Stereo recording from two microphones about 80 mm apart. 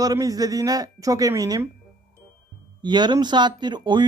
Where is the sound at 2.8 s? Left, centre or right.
Right.